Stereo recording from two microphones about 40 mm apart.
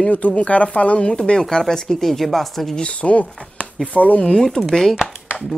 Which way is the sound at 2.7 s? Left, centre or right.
Left.